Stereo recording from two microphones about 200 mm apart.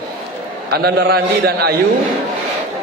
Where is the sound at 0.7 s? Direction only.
55° right (ahead or behind).